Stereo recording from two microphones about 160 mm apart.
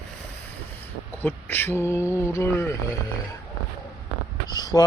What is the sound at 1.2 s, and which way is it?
Speech, 15° left (ahead or behind).